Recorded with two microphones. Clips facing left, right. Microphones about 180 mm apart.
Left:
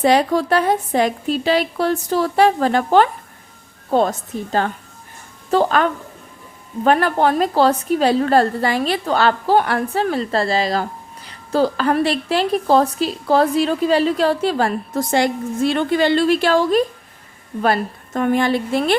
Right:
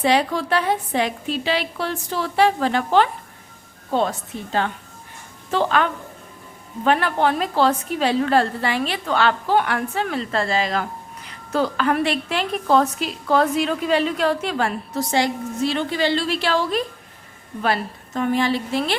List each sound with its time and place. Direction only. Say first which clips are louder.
0.0 s a woman's voice: left 4 dB; 45° left (ahead or behind)
4.3 s a woman's voice: left 3 dB; 45° left (ahead or behind)